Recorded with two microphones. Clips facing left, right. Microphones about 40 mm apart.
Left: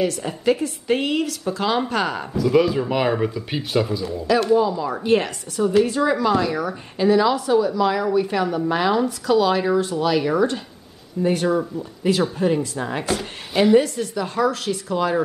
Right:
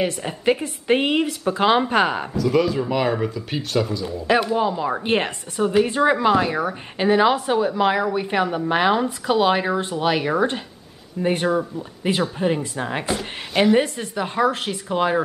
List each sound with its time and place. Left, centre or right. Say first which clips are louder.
0.0 s a woman's voice: even; right
2.3 s speech: left 4 dB; centre
4.6 s a woman's voice: left 1 dB; right
13.1 s speech: left 1 dB; centre
13.7 s a woman's voice: left 3 dB; right